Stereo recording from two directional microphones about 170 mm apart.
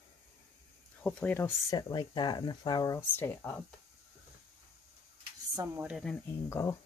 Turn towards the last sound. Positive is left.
turn(degrees=15)  # may be behind; listen again after turning